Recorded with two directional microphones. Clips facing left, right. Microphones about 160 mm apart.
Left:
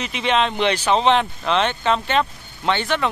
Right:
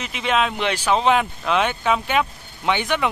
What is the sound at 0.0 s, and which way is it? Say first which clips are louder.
Speech: left 1 dB; 5° right (ahead or behind).